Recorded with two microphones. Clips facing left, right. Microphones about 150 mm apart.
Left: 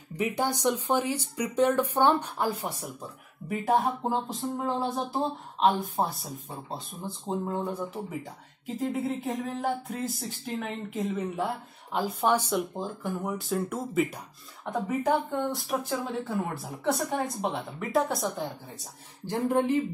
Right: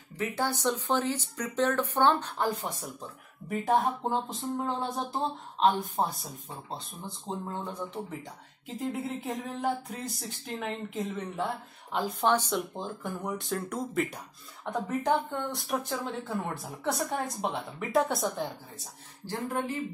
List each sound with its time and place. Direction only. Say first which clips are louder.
0.1 s speech: left 3 dB; 15° left (ahead or behind)
7.2 s speech: left 5 dB; 10° left (ahead or behind)
19.2 s speech: left 7 dB; 20° left (ahead or behind)